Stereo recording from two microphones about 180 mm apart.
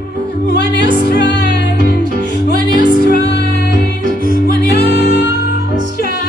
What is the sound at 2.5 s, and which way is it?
Music, 50° right (ahead or behind).